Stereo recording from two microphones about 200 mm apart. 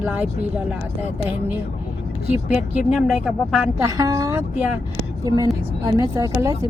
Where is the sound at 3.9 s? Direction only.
15° right (ahead or behind).